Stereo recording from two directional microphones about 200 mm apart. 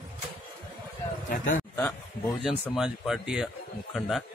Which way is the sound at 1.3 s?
40° left (ahead or behind).